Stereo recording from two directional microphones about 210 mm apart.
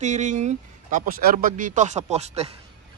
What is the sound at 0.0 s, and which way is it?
Speech, 35° right (ahead or behind).